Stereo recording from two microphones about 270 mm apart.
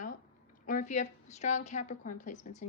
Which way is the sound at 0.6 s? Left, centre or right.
Left.